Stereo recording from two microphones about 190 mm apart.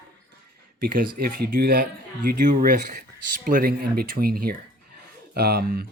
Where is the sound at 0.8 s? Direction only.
50° right (ahead or behind).